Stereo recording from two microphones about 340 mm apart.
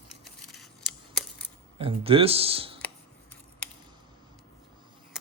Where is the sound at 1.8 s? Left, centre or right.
Centre.